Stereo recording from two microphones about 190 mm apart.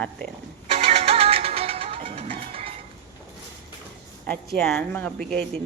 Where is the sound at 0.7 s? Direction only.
30° right (ahead or behind).